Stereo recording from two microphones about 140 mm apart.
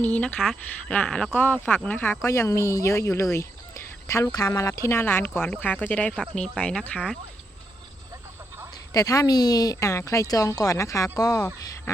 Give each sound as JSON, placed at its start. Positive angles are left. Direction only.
{"t": 0.0, "sound": "speech", "side_deg": 10}
{"t": 8.9, "sound": "speech", "side_deg": 25}